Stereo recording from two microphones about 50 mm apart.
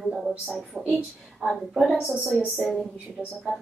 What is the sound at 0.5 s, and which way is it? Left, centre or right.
A woman's voice, centre.